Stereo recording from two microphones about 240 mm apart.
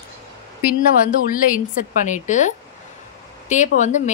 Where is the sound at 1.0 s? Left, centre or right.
Left.